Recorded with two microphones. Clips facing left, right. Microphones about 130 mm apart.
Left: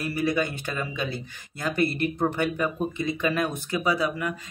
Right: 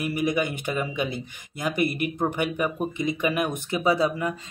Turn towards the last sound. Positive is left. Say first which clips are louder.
# right 3 dB
turn(degrees=-25)  # may be behind; listen again after turning